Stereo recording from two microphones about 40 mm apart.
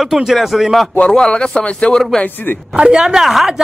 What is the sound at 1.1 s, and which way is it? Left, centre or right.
Speech, left.